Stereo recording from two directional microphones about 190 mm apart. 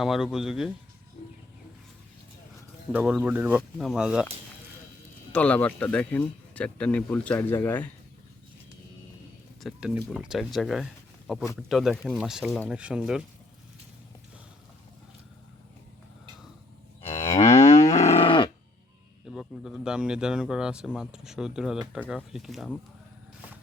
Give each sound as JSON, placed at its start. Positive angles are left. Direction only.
{"t": 0.0, "sound": "speech", "side_deg": 0}
{"t": 2.9, "sound": "speech", "side_deg": -10}
{"t": 5.3, "sound": "speech", "side_deg": 5}
{"t": 9.6, "sound": "speech", "side_deg": 0}
{"t": 17.1, "sound": "moo", "side_deg": 35}
{"t": 17.9, "sound": "cattle", "side_deg": 35}
{"t": 19.3, "sound": "a man's voice", "side_deg": 0}